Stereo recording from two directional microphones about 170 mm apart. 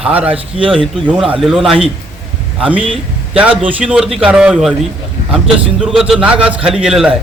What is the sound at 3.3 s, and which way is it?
Speech, 10° right (ahead or behind).